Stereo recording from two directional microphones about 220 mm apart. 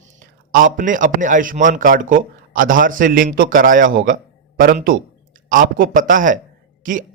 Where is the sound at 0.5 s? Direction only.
35° right (ahead or behind).